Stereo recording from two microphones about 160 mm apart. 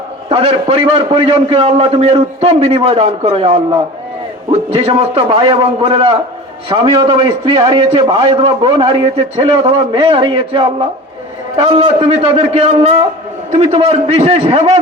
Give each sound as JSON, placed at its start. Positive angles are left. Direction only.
{"t": 0.3, "sound": "a man's voice", "side_deg": -35}